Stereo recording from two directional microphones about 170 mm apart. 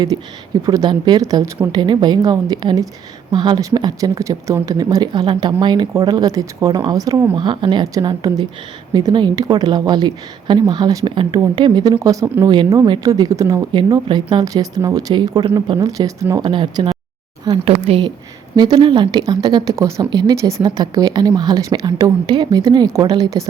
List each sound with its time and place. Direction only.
0.1 s speech: 30° right (ahead or behind)
7.3 s speech: 30° right (ahead or behind)
12.5 s speech: 25° right (ahead or behind)
17.8 s speech: 35° right (ahead or behind)